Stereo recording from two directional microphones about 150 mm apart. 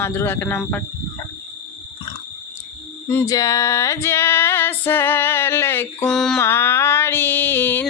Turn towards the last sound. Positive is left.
turn(degrees=15)  # may be behind; listen again after turning